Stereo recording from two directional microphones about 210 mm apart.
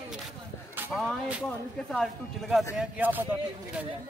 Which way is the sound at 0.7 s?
5° right (ahead or behind).